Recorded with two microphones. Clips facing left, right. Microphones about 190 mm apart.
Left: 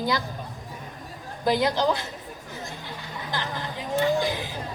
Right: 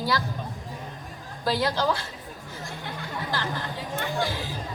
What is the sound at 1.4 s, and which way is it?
Speech, 20° left (ahead or behind).